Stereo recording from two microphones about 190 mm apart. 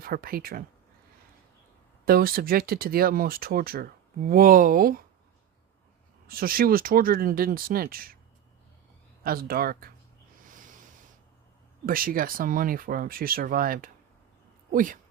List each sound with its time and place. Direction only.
0.0 s speech: 50° right (ahead or behind)
2.0 s speech: 50° right (ahead or behind)
6.2 s speech: 50° right (ahead or behind)
9.2 s speech: 50° right (ahead or behind)
10.5 s snort: 40° right (ahead or behind)
11.9 s speech: 50° right (ahead or behind)